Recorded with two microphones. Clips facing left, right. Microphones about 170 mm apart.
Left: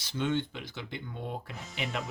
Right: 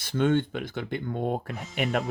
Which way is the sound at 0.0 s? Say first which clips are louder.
Right 7 dB; 55° right (ahead or behind).